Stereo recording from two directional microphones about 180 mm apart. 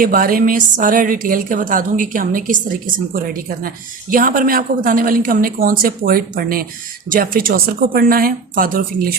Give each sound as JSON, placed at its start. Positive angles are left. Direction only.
{"t": 0.0, "sound": "a woman's voice", "side_deg": -50}